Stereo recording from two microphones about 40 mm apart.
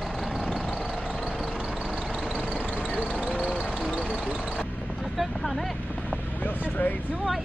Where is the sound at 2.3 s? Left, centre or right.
Left.